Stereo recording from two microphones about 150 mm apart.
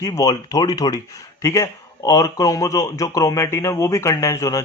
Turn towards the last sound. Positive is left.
turn(degrees=20)  # may be behind; listen again after turning